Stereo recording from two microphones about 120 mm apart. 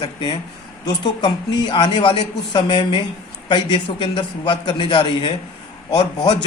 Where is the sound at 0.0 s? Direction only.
40° left (ahead or behind).